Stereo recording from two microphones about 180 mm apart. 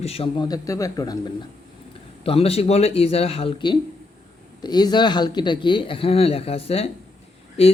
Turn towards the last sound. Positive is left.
turn(degrees=35)  # may be behind; listen again after turning